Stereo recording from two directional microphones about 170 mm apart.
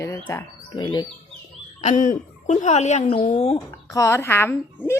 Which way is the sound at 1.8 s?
45° left (ahead or behind).